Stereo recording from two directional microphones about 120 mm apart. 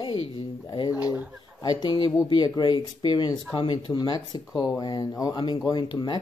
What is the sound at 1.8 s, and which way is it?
Speech, 35° left (ahead or behind).